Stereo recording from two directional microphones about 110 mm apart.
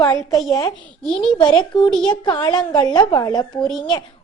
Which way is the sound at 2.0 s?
45° left (ahead or behind).